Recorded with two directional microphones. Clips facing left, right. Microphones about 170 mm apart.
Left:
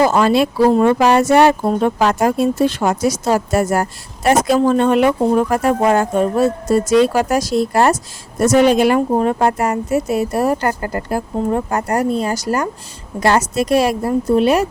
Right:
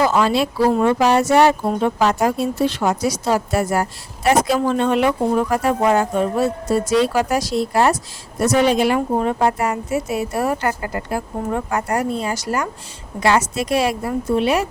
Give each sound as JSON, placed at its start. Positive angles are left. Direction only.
{"t": 0.0, "sound": "a woman's voice", "side_deg": 45}